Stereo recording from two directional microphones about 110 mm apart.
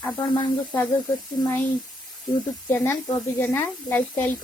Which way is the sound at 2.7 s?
20° left (ahead or behind).